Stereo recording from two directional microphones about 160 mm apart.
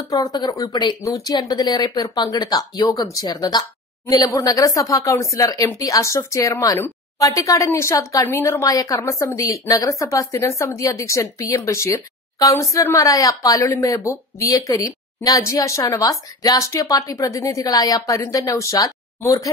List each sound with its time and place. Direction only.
0.1 s a woman's voice: 25° left (ahead or behind)